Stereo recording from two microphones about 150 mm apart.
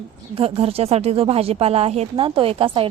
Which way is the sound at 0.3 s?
40° right (ahead or behind).